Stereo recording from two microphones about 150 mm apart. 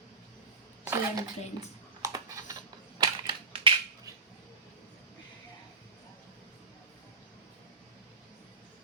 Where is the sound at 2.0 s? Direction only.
25° right (ahead or behind).